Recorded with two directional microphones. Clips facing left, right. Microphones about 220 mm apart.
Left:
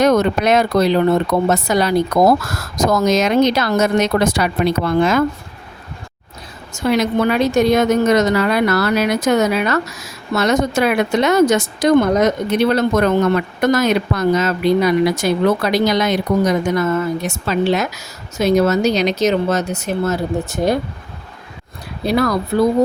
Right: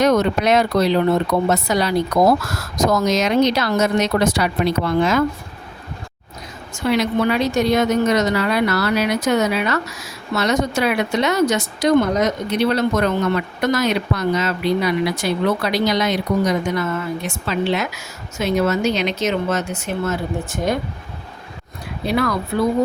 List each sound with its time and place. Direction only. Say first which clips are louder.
0.0 s speech: left 2 dB; 50° left (ahead or behind)
6.7 s speech: left 2 dB; 45° left (ahead or behind)
22.0 s speech: left 3 dB; 40° left (ahead or behind)